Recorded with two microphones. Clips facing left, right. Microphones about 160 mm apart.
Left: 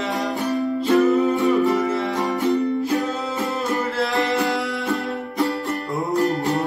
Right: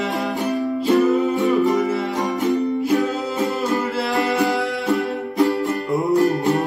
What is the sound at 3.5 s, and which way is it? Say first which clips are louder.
Music: right 2 dB; 5° right (ahead or behind).